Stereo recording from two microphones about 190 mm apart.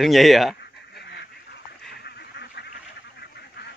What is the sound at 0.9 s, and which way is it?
Duck, 60° left (ahead or behind).